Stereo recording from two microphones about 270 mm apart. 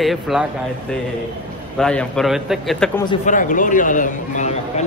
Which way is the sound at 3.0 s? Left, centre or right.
Left.